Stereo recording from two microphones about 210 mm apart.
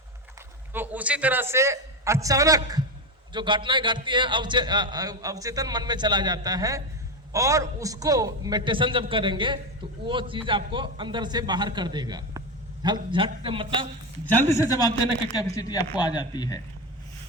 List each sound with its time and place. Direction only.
0.7 s a man's voice: 10° right (ahead or behind); by 13.7 s 25° right (ahead or behind)
14.7 s a man's voice: 15° left (ahead or behind)